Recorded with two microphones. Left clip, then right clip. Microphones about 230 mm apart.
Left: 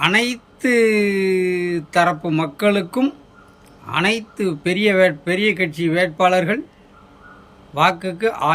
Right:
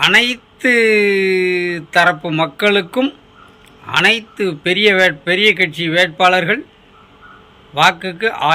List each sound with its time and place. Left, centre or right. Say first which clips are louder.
0.0 s speech: right 6 dB; centre
7.7 s speech: right 4 dB; centre